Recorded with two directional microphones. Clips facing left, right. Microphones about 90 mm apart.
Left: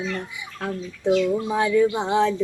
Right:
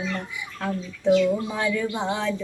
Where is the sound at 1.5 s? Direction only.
20° left (ahead or behind).